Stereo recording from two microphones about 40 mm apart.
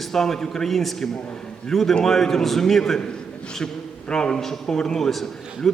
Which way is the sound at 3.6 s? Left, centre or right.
Centre.